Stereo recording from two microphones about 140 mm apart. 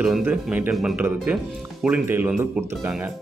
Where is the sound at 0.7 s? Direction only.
Centre (ahead or behind).